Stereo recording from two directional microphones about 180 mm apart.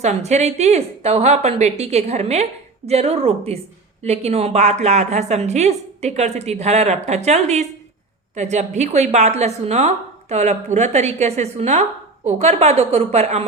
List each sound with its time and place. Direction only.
0.0 s a woman's voice: 40° right (ahead or behind)